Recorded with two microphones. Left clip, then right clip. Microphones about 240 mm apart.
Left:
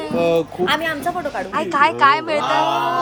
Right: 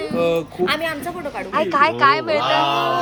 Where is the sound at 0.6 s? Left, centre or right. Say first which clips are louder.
Left 2 dB; centre.